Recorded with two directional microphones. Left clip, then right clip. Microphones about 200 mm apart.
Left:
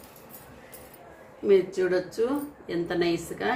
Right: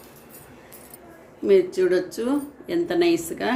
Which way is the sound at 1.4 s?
30° right (ahead or behind).